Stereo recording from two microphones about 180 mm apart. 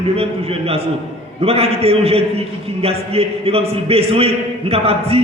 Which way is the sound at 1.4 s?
35° right (ahead or behind).